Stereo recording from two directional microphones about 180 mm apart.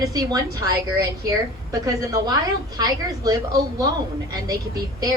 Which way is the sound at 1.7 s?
20° right (ahead or behind).